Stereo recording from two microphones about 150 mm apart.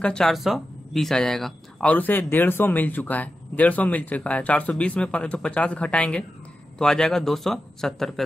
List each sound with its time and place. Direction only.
0.0 s speech: 5° left (ahead or behind)